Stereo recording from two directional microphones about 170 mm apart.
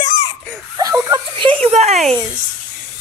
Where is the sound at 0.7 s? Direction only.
20° right (ahead or behind); by 2.0 s 40° right (ahead or behind).